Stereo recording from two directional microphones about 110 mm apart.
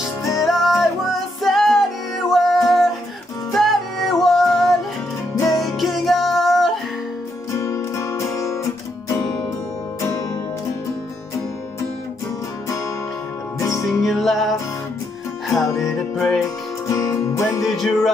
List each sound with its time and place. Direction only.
0.4 s music: centre (ahead or behind)
7.6 s music: 30° left (ahead or behind)
12.6 s music: 30° left (ahead or behind)
14.0 s music: centre (ahead or behind)
16.4 s music: 30° left (ahead or behind)
17.6 s music: centre (ahead or behind)